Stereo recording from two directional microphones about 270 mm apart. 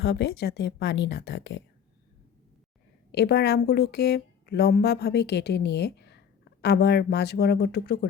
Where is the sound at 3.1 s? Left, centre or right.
Left.